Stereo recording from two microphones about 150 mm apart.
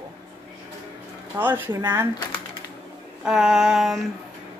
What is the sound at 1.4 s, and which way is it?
Speech, 15° right (ahead or behind).